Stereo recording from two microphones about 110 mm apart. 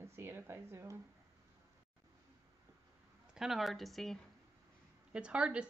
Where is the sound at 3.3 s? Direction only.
5° right (ahead or behind).